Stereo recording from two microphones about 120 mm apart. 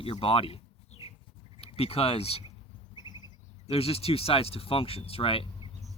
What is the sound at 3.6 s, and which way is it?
Speech, 55° left (ahead or behind).